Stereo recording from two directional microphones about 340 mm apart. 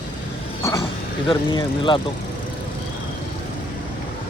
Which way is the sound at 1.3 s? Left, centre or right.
Centre.